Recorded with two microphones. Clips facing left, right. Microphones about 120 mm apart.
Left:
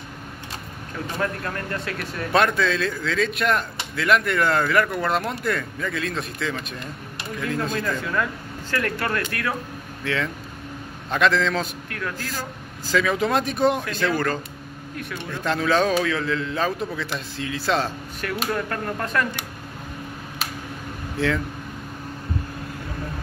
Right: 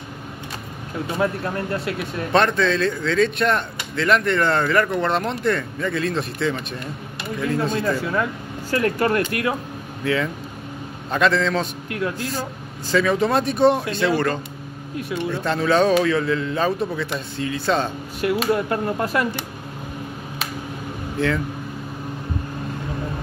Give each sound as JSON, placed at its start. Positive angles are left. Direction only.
{"t": 1.0, "sound": "speech", "side_deg": -15}
{"t": 2.3, "sound": "speech", "side_deg": 5}
{"t": 7.9, "sound": "speech", "side_deg": -15}
{"t": 10.0, "sound": "speech", "side_deg": -5}
{"t": 11.9, "sound": "speech", "side_deg": -20}
{"t": 12.8, "sound": "speech", "side_deg": 0}
{"t": 18.5, "sound": "speech", "side_deg": -20}
{"t": 21.2, "sound": "speech", "side_deg": 0}